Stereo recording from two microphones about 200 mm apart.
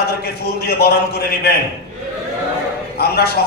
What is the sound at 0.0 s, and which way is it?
A man's voice, 50° left (ahead or behind).